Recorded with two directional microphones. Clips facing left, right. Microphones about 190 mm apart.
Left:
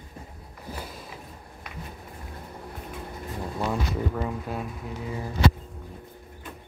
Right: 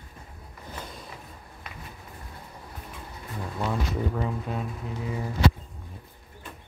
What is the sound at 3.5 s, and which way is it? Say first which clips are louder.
Speech: even; 5° left (ahead or behind).